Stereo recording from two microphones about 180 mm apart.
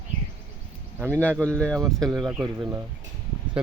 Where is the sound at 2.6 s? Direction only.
15° right (ahead or behind).